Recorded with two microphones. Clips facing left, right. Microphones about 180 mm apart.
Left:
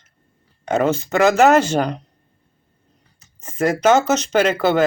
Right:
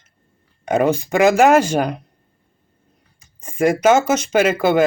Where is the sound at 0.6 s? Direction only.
15° right (ahead or behind).